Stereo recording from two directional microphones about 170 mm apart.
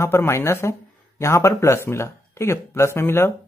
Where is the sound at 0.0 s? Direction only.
15° left (ahead or behind).